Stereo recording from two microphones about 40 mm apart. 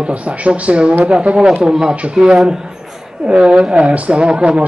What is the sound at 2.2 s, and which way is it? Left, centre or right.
Speech, centre.